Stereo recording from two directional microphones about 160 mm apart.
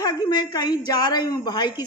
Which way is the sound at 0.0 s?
25° left (ahead or behind).